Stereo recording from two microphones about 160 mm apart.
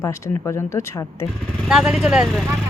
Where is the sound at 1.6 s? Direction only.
5° right (ahead or behind).